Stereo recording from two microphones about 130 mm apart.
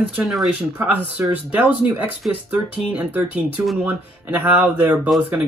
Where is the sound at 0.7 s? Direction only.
10° right (ahead or behind).